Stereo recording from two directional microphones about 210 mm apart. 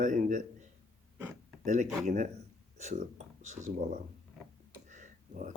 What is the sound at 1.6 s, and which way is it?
Speech, 35° right (ahead or behind).